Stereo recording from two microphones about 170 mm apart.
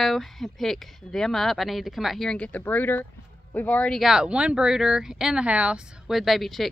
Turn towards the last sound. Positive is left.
turn(degrees=0)  # may be behind; listen again after turning